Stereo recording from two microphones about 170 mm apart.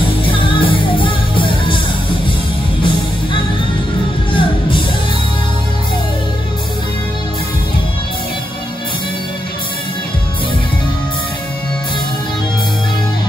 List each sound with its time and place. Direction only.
0.2 s music: 30° left (ahead or behind)
4.3 s music: 30° left (ahead or behind)